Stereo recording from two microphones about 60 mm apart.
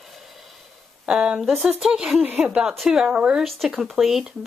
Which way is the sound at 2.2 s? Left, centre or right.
Right.